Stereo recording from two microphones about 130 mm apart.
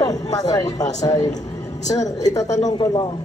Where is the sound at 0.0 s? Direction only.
25° left (ahead or behind).